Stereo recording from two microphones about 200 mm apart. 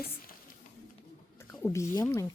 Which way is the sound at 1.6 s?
15° left (ahead or behind).